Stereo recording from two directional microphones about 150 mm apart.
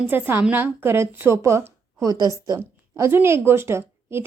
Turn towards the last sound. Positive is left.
turn(degrees=-15)  # may be behind; listen again after turning